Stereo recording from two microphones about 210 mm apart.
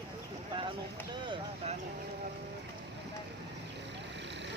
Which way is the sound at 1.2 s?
25° right (ahead or behind).